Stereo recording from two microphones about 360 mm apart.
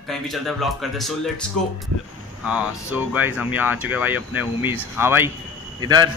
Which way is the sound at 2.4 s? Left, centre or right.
Centre.